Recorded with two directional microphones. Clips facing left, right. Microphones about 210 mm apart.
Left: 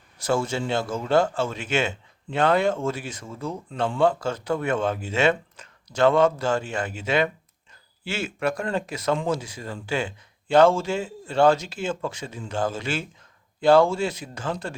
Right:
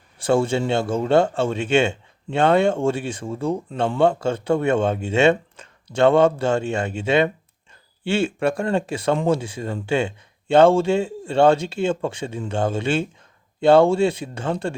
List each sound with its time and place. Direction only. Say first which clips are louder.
0.7 s speech: right 2 dB; 25° right (ahead or behind)